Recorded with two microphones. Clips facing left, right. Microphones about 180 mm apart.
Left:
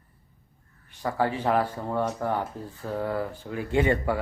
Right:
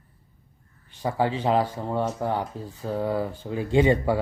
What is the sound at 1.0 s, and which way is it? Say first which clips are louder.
Speech: right 2 dB; 20° right (ahead or behind).